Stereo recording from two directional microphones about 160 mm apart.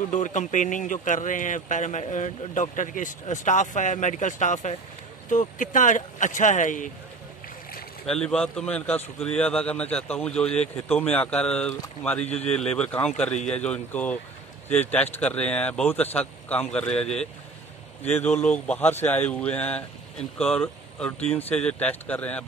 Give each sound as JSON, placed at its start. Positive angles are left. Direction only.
{"t": 0.1, "sound": "speech", "side_deg": 50}
{"t": 8.1, "sound": "speech", "side_deg": 5}